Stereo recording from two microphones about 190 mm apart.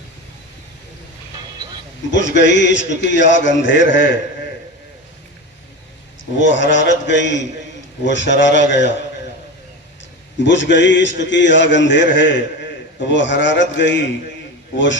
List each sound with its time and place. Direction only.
2.0 s a man's voice: 70° left (ahead or behind)
6.3 s a man's voice: 70° left (ahead or behind)
10.4 s a man's voice: 70° left (ahead or behind)